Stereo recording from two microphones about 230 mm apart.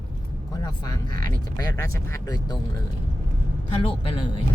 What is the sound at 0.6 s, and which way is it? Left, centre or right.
Speech, centre.